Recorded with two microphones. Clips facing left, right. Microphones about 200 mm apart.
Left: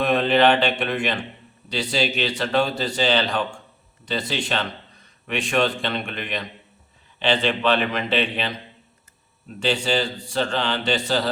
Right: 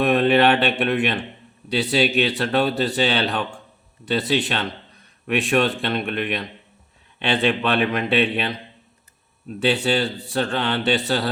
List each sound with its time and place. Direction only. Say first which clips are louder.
0.0 s a man's voice: right 2 dB; 60° right (ahead or behind)
10.3 s a man's voice: right 1 dB; 60° right (ahead or behind)